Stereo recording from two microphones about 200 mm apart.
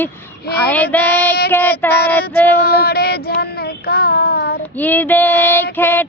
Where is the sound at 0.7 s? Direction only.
10° left (ahead or behind).